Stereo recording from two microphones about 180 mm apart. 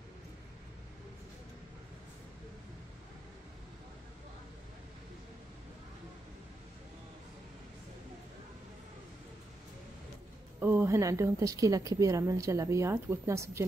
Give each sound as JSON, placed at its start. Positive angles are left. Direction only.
{"t": 10.6, "sound": "a woman's voice", "side_deg": -10}